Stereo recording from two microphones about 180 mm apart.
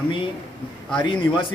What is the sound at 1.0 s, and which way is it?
Speech, 30° left (ahead or behind).